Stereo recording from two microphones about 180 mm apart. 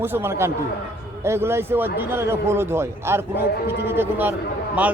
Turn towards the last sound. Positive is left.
turn(degrees=-10)  # may be behind; listen again after turning